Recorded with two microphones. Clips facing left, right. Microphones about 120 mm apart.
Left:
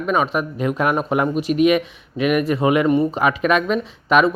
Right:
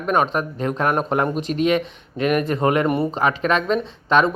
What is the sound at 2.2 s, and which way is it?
Speech, 35° right (ahead or behind).